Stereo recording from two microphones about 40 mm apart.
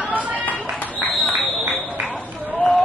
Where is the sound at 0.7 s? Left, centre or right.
Left.